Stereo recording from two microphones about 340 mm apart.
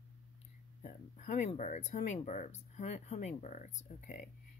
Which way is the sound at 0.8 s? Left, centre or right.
Left.